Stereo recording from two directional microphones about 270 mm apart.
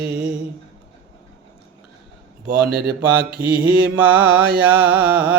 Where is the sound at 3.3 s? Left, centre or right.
Right.